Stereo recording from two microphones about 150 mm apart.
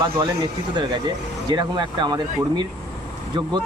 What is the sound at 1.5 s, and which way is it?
Speech, 30° right (ahead or behind).